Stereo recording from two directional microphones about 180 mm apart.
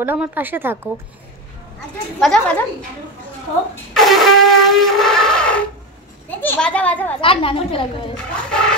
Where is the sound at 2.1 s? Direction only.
Centre (ahead or behind).